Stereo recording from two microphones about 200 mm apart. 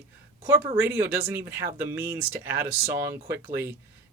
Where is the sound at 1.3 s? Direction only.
10° right (ahead or behind).